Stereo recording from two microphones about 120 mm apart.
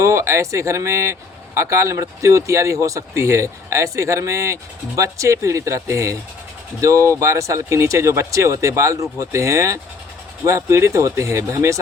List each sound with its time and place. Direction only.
0.0 s speech: 25° right (ahead or behind)